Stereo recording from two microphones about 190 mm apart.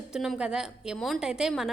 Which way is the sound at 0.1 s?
Centre (ahead or behind).